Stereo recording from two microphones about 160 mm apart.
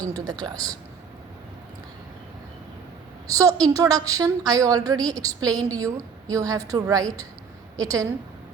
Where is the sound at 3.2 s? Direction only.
20° right (ahead or behind).